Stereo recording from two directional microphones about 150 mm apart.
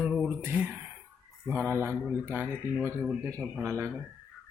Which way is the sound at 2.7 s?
5° left (ahead or behind).